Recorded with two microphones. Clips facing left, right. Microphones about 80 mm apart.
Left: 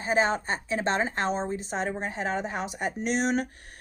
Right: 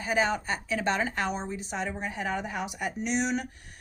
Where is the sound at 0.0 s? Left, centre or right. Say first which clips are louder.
Left 2 dB; left.